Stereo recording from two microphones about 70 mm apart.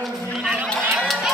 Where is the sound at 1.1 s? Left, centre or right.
Centre.